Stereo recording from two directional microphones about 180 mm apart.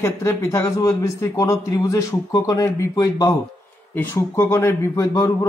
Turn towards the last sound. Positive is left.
turn(degrees=15)  # may be behind; listen again after turning